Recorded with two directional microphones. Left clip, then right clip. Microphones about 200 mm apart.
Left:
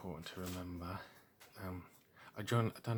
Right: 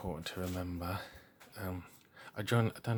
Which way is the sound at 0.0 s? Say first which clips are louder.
Right 7 dB; 30° right (ahead or behind).